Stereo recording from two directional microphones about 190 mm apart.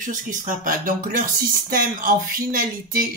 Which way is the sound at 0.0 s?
45° right (ahead or behind).